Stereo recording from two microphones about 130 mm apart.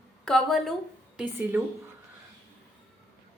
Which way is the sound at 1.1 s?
15° right (ahead or behind).